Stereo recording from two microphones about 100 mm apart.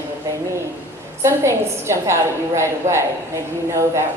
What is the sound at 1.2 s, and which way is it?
A woman's voice, 25° right (ahead or behind).